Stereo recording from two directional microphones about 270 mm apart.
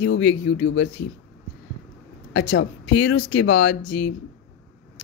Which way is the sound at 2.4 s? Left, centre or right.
Left.